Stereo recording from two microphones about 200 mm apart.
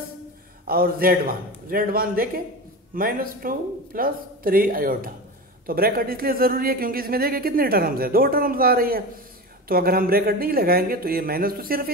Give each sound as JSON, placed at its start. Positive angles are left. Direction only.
{"t": 0.7, "sound": "speech", "side_deg": -45}